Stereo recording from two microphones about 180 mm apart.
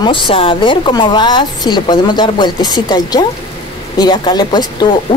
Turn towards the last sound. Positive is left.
turn(degrees=25)  # may be behind; listen again after turning